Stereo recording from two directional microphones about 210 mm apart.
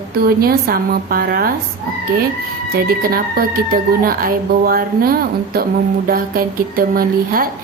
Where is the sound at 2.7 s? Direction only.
45° right (ahead or behind).